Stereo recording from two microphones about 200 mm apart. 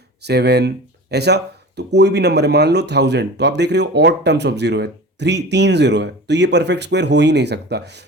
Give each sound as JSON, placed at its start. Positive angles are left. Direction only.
{"t": 0.3, "sound": "speech", "side_deg": -55}